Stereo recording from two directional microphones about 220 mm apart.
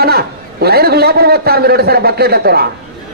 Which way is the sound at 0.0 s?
45° right (ahead or behind).